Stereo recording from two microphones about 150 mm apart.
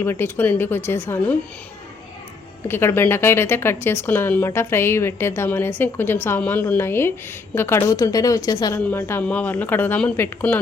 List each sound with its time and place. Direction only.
0.0 s speech: 15° left (ahead or behind)
2.6 s speech: 15° left (ahead or behind)